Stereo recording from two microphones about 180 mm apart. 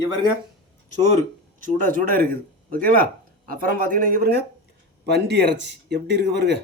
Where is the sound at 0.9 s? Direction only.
40° right (ahead or behind); by 4.4 s 55° right (ahead or behind).